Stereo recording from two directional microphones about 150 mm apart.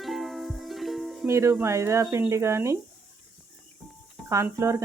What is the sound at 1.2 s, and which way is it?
Speech, 20° right (ahead or behind).